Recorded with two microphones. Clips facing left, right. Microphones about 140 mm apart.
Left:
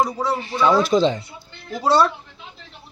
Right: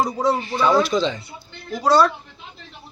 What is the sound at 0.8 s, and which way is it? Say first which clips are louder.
Speech: left 2 dB; 45° left (ahead or behind).